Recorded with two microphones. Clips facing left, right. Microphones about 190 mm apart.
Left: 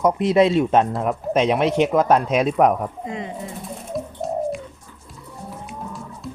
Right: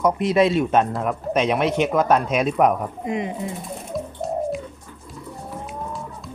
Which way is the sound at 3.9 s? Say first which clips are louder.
Left 1 dB; centre (ahead or behind).